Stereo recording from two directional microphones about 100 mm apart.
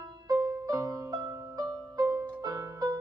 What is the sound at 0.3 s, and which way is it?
Music, 30° right (ahead or behind).